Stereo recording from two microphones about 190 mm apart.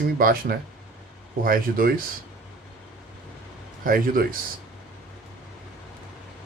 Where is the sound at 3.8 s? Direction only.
50° right (ahead or behind).